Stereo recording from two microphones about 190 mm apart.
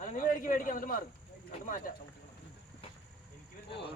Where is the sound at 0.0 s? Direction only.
45° left (ahead or behind).